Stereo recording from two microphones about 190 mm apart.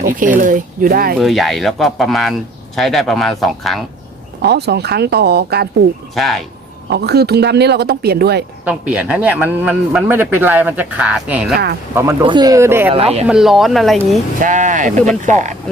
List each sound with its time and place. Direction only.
0.0 s speech: 45° right (ahead or behind)
1.2 s speech: centre (ahead or behind)
4.4 s speech: 60° right (ahead or behind)
6.1 s speech: centre (ahead or behind)
6.9 s speech: 60° right (ahead or behind)
8.6 s speech: 5° right (ahead or behind)
12.2 s speech: 25° right (ahead or behind)
12.9 s speech: 30° right (ahead or behind)
13.2 s speech: 5° right (ahead or behind)
14.4 s speech: 40° right (ahead or behind)